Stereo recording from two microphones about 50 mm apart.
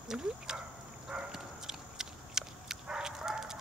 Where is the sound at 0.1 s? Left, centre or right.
Centre.